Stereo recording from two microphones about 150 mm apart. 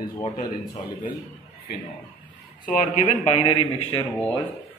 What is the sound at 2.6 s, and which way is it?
A man's voice, 55° left (ahead or behind).